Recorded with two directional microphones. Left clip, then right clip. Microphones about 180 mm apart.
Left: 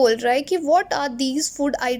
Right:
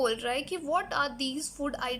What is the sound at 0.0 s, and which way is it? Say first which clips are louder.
Speech: left 11 dB; 35° left (ahead or behind).